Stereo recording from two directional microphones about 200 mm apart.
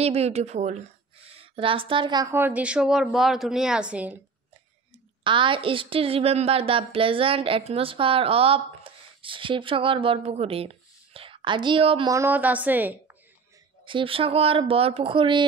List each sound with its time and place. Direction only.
0.0 s speech: 30° right (ahead or behind); by 4.2 s 5° right (ahead or behind)
5.2 s a woman's voice: 25° right (ahead or behind)
12.1 s speech: 10° right (ahead or behind)
13.8 s a woman's voice: 25° right (ahead or behind)